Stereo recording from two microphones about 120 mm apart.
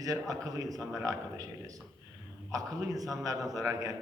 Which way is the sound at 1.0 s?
30° right (ahead or behind).